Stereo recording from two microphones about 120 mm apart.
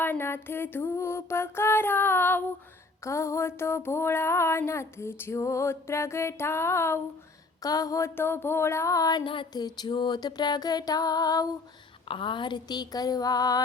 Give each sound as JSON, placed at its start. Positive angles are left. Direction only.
{"t": 0.0, "sound": "a sound", "side_deg": 20}
{"t": 9.2, "sound": "music", "side_deg": 45}
{"t": 12.0, "sound": "music", "side_deg": 45}